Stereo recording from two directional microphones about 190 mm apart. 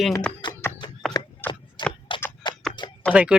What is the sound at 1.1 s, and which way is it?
Chopping, 10° left (ahead or behind).